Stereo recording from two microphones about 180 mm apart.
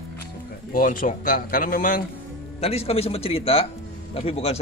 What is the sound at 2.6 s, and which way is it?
A man's voice, 35° left (ahead or behind).